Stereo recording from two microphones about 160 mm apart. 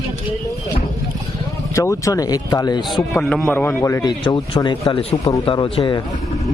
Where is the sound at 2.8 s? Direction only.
Centre (ahead or behind); by 4.9 s 25° left (ahead or behind).